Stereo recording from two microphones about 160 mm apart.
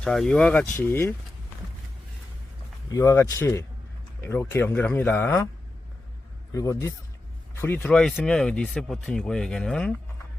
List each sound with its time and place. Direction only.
0.0 s speech: 5° left (ahead or behind)
0.8 s speech: 15° left (ahead or behind)
2.9 s speech: 20° left (ahead or behind)
6.5 s speech: 20° left (ahead or behind); by 9.9 s 5° left (ahead or behind)